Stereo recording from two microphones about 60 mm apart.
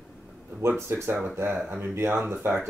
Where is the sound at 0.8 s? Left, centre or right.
Right.